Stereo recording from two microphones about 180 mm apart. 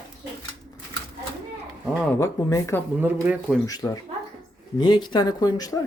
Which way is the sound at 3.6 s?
20° left (ahead or behind).